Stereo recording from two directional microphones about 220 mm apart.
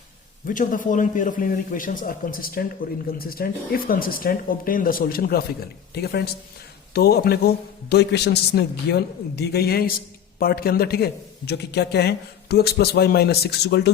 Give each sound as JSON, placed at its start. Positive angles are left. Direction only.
{"t": 0.4, "sound": "a man's voice", "side_deg": 35}